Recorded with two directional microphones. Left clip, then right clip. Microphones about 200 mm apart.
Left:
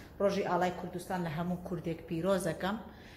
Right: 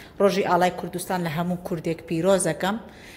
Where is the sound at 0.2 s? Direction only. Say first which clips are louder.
Right 11 dB; 50° right (ahead or behind).